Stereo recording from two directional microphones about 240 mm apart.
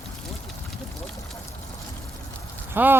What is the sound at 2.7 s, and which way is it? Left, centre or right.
Speech, centre.